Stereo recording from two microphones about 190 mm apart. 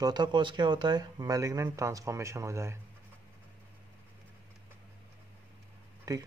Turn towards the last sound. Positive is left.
turn(degrees=-20)  # may be behind; listen again after turning